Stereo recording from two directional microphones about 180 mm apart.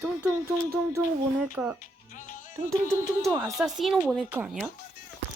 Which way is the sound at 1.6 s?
10° right (ahead or behind).